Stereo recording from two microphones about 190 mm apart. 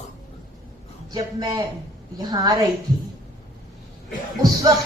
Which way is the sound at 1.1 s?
20° right (ahead or behind).